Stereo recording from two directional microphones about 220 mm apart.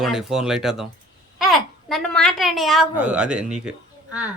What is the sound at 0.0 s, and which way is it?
A woman's voice, centre (ahead or behind).